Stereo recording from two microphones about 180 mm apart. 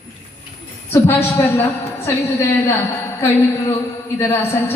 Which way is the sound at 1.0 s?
10° left (ahead or behind).